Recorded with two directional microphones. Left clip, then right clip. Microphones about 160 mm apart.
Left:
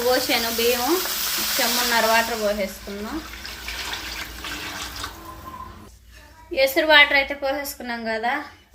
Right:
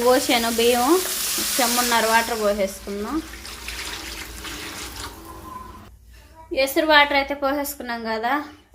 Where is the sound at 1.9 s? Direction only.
30° right (ahead or behind).